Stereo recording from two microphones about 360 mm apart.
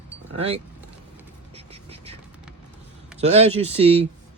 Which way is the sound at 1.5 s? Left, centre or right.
Centre.